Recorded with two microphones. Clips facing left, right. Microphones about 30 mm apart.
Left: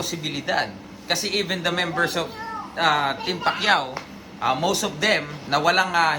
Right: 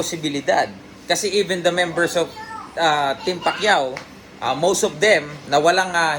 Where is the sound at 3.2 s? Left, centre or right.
Left.